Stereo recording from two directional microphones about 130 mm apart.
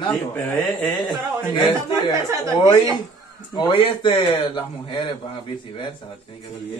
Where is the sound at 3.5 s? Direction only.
40° left (ahead or behind).